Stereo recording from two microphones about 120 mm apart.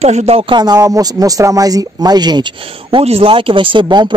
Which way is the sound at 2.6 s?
45° right (ahead or behind).